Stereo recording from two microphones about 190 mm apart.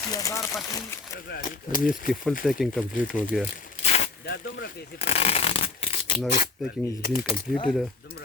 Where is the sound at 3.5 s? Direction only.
35° left (ahead or behind).